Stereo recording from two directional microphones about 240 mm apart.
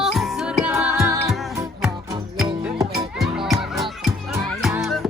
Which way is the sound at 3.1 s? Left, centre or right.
Centre.